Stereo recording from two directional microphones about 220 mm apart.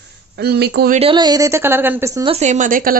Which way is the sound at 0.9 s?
25° right (ahead or behind).